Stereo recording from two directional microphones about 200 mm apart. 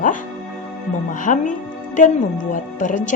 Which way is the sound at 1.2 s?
40° left (ahead or behind).